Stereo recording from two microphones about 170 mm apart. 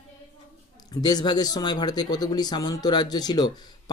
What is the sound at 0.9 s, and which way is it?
Speech, 25° left (ahead or behind).